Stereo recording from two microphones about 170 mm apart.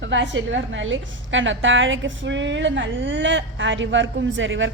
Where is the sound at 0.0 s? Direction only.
90° right.